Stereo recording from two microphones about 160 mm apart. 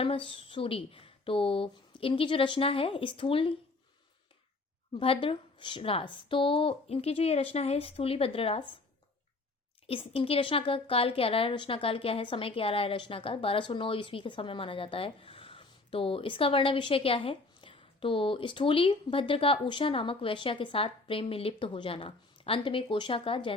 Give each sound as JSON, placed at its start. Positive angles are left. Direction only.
{"t": 0.0, "sound": "a woman's voice", "side_deg": 35}
{"t": 4.9, "sound": "a woman's voice", "side_deg": 35}
{"t": 9.8, "sound": "a woman's voice", "side_deg": 35}